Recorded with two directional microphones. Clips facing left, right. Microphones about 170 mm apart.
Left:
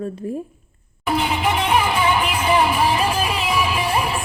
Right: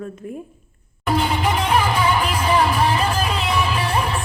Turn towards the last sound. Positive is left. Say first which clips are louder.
# left 1 dB
turn(degrees=10)  # may be behind; listen again after turning